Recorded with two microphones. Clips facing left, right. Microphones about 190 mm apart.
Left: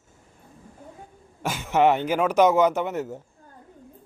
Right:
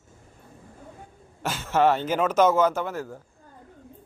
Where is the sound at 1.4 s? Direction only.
15° left (ahead or behind).